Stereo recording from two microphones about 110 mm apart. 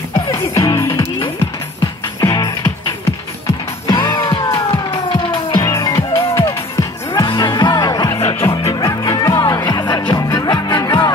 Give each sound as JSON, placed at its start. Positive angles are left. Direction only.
{"t": 0.3, "sound": "music", "side_deg": 30}
{"t": 2.1, "sound": "music", "side_deg": 35}
{"t": 3.8, "sound": "music", "side_deg": 40}
{"t": 5.6, "sound": "music", "side_deg": 30}
{"t": 5.9, "sound": "music", "side_deg": 55}
{"t": 6.4, "sound": "music", "side_deg": 30}
{"t": 7.2, "sound": "music", "side_deg": 45}
{"t": 8.4, "sound": "music", "side_deg": 25}